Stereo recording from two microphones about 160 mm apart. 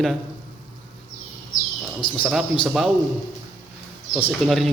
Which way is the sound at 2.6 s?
Centre (ahead or behind).